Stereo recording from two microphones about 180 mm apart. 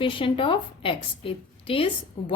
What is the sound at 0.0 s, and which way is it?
A woman's voice, 30° left (ahead or behind).